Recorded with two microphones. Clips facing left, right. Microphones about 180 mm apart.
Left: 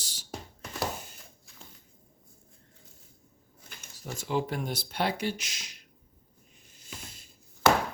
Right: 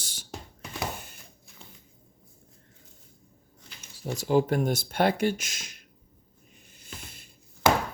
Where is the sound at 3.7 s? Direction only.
50° left (ahead or behind).